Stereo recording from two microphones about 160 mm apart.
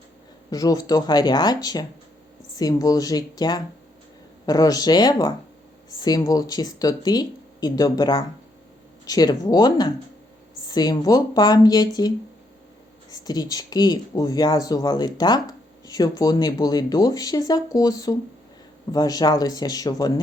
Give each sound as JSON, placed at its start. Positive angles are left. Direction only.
{"t": 0.5, "sound": "speech", "side_deg": 20}